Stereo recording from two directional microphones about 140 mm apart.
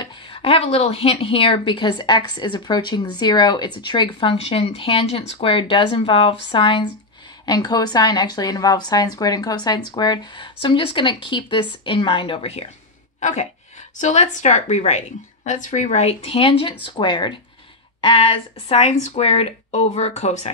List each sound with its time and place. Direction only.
0.0 s a woman's voice: 35° left (ahead or behind)
13.2 s a woman's voice: 55° left (ahead or behind)